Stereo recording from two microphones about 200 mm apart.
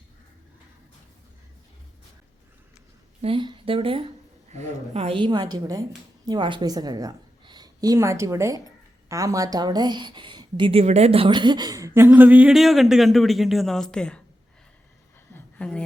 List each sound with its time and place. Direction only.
3.2 s a woman's voice: 25° right (ahead or behind); by 14.2 s 5° left (ahead or behind)
15.5 s speech: 5° left (ahead or behind)